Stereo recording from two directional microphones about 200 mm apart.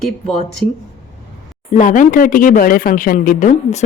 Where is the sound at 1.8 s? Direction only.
40° left (ahead or behind).